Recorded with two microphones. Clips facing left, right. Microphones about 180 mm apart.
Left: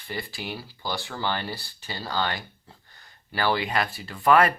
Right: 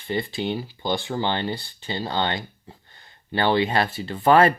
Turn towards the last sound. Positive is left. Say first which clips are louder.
# right 3 dB
turn(degrees=-30)  # may be behind; listen again after turning